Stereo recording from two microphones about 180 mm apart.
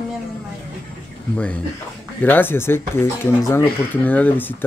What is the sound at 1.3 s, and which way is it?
Speech, 5° left (ahead or behind).